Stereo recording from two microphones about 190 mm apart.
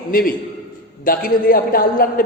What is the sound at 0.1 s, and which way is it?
A man's voice, 50° left (ahead or behind).